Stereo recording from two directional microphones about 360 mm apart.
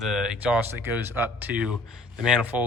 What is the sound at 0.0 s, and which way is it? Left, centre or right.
Speech, centre.